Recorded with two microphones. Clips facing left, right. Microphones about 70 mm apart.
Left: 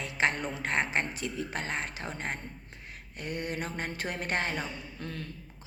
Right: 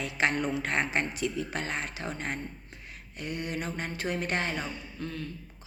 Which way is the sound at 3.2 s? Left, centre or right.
Left.